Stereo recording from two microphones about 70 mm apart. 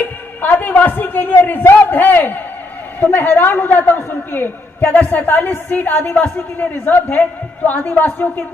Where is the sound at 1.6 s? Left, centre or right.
Left.